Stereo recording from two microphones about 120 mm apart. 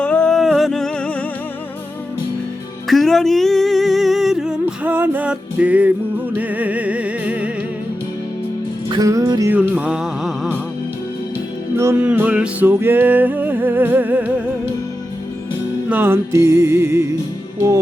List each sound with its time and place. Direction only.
0.0 s music: 10° left (ahead or behind)
2.8 s music: centre (ahead or behind)
8.9 s music: 30° right (ahead or behind)
9.5 s music: 15° right (ahead or behind)
11.8 s music: 20° right (ahead or behind)
15.9 s music: 15° right (ahead or behind)